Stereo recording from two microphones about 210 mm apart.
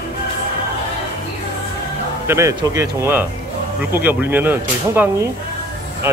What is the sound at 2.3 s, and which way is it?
Speech, 15° right (ahead or behind).